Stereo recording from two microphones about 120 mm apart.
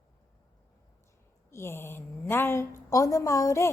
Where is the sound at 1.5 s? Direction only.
20° left (ahead or behind).